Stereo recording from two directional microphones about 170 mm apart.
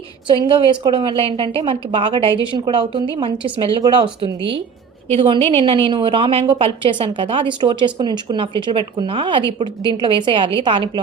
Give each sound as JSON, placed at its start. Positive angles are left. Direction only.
{"t": 0.4, "sound": "a woman's voice", "side_deg": -30}